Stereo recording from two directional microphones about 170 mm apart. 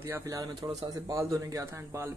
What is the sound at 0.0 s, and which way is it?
Speech, 20° right (ahead or behind).